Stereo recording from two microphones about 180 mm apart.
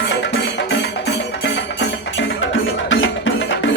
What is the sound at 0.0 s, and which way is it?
Music, 75° left (ahead or behind).